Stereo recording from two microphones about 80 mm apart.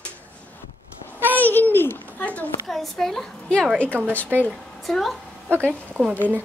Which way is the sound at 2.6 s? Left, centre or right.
Centre.